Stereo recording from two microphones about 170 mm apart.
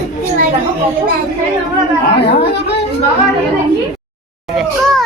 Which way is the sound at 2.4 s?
80° left.